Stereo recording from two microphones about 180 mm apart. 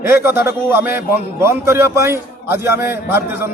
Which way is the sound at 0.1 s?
15° right (ahead or behind).